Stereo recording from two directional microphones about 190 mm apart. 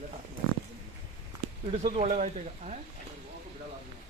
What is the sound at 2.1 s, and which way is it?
Speech, 40° right (ahead or behind).